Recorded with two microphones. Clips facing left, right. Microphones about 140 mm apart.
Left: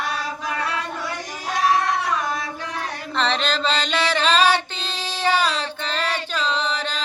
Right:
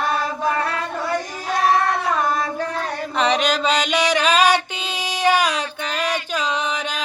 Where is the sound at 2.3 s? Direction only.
45° right (ahead or behind).